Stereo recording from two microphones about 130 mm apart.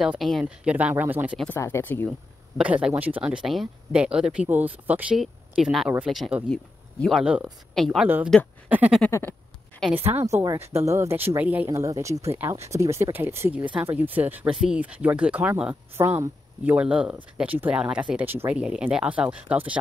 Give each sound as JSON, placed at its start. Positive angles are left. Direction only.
{"t": 0.0, "sound": "speech", "side_deg": 0}
{"t": 0.7, "sound": "speech", "side_deg": -10}
{"t": 1.5, "sound": "speech", "side_deg": 20}
{"t": 2.0, "sound": "speech", "side_deg": -5}
{"t": 7.2, "sound": "speech", "side_deg": -5}
{"t": 8.6, "sound": "speech", "side_deg": -10}
{"t": 9.8, "sound": "speech", "side_deg": 5}
{"t": 10.4, "sound": "speech", "side_deg": -25}